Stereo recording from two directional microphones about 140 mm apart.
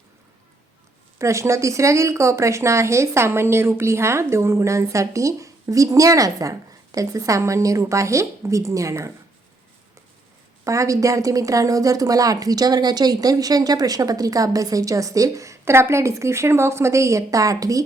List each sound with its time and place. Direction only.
1.2 s a woman's voice: 20° right (ahead or behind)
10.6 s a woman's voice: 20° right (ahead or behind)